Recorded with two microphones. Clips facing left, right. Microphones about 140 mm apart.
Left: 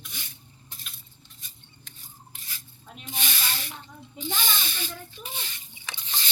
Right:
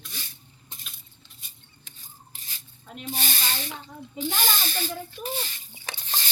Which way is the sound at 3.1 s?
35° right (ahead or behind).